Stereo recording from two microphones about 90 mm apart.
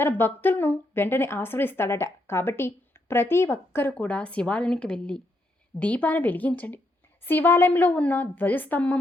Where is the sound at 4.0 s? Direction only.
15° left (ahead or behind).